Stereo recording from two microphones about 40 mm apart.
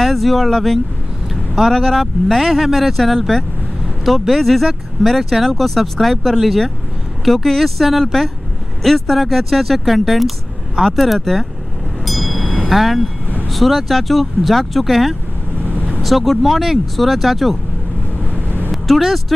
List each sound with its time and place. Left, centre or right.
0.0 s speech: centre
1.3 s vehicle: centre
1.7 s speech: centre
12.0 s a sound: centre
12.6 s speech: centre
18.2 s vehicle: left
18.7 s speech: centre